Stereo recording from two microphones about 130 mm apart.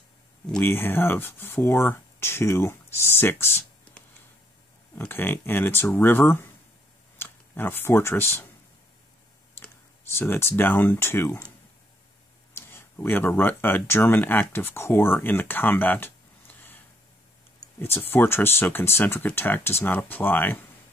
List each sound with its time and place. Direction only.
0.5 s speech: 15° left (ahead or behind)
9.6 s speech: 15° left (ahead or behind)
12.5 s speech: 15° left (ahead or behind)
17.7 s speech: 15° left (ahead or behind)